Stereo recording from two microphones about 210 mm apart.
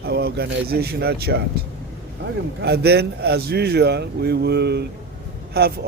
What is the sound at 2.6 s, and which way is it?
Speech, 50° right (ahead or behind).